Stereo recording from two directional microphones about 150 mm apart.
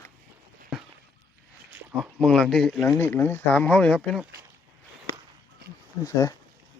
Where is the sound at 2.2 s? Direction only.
5° left (ahead or behind).